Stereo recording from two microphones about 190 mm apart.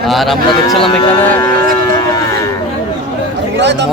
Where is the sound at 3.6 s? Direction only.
65° right (ahead or behind).